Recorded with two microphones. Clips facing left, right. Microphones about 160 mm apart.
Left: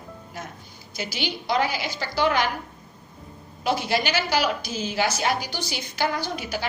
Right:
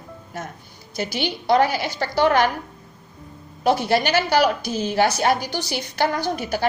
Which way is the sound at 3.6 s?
55° right (ahead or behind).